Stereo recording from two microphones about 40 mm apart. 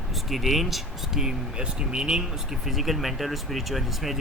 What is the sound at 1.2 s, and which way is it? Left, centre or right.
Speech, right.